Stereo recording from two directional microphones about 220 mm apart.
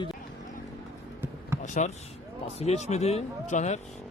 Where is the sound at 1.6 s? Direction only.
35° left (ahead or behind).